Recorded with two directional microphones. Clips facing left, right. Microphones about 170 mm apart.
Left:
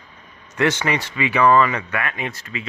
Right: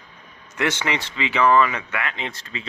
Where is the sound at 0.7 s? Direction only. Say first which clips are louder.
Left 3 dB; 20° right (ahead or behind).